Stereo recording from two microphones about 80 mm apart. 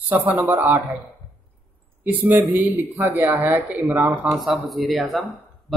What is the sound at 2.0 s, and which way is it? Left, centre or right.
Speech, right.